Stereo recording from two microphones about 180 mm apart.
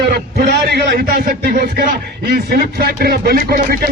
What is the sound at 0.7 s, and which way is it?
Speech, 65° right (ahead or behind).